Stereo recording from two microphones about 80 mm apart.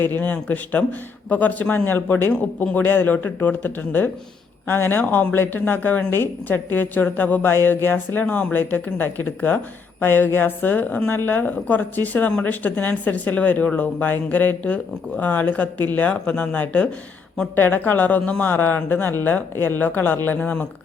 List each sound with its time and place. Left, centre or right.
0.0 s speech: left